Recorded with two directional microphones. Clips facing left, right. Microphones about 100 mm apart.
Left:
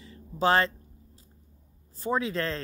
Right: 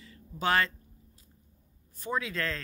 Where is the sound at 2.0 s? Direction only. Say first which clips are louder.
Left 4 dB; 30° left (ahead or behind).